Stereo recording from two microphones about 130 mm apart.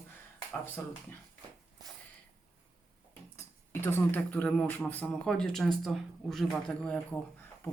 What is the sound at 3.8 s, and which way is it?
Speech, 15° left (ahead or behind).